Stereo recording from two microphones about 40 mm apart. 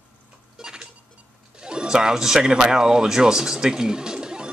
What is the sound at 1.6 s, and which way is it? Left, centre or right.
Speech, right.